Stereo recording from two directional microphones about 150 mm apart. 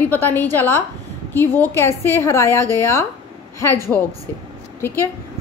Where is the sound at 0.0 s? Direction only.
10° left (ahead or behind).